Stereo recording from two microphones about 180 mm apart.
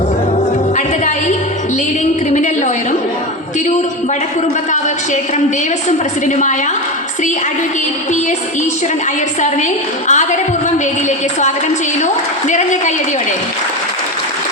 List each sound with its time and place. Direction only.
2.3 s a sound: 45° left (ahead or behind)
6.2 s a woman's voice: 45° left (ahead or behind)
9.4 s a woman's voice: 40° left (ahead or behind)
12.5 s a woman's voice: 40° left (ahead or behind)